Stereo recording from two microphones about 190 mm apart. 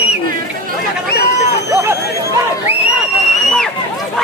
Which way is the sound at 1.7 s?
15° right (ahead or behind).